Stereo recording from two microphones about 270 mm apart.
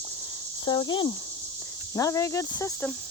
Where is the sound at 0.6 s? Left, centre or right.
Centre.